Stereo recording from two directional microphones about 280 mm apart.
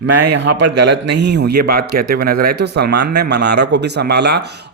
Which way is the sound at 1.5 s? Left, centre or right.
Right.